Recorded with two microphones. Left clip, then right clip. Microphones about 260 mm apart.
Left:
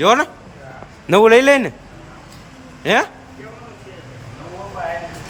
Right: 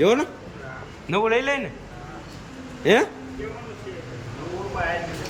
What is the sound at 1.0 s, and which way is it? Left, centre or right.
Speech, centre.